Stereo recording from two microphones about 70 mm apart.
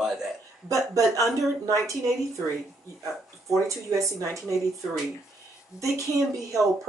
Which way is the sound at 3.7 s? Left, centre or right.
Right.